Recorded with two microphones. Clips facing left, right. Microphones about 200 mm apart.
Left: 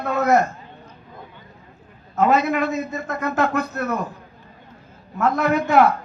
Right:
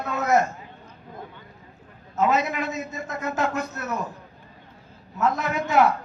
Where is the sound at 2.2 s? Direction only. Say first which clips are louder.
Left 5 dB; 60° left (ahead or behind).